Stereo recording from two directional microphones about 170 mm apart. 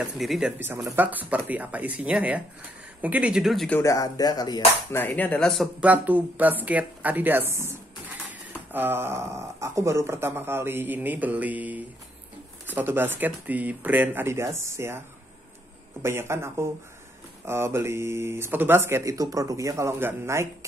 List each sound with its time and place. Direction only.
0.0 s speech: 5° right (ahead or behind)
3.8 s speech: 20° left (ahead or behind)
4.9 s speech: 10° left (ahead or behind); by 15.0 s 15° right (ahead or behind)
16.0 s speech: 15° right (ahead or behind)